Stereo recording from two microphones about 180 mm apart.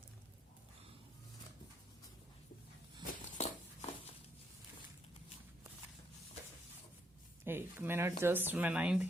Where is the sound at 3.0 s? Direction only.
40° left (ahead or behind).